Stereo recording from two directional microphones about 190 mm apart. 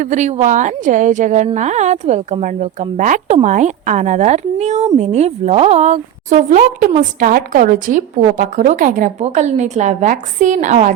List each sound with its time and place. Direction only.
0.0 s a woman's voice: 40° right (ahead or behind)